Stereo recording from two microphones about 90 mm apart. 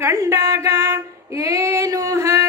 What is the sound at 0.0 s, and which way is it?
Female singing, 30° right (ahead or behind).